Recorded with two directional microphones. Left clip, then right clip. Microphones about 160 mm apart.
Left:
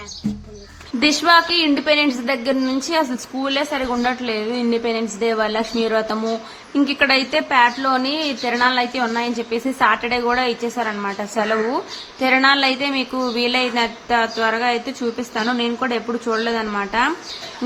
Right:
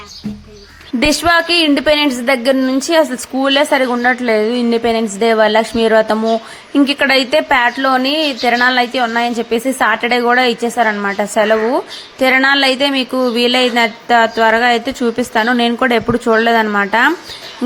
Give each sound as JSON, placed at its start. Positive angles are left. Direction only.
{"t": 0.9, "sound": "a woman's voice", "side_deg": -40}